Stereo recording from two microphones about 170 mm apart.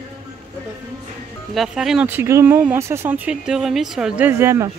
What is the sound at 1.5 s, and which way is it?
Speech, centre (ahead or behind).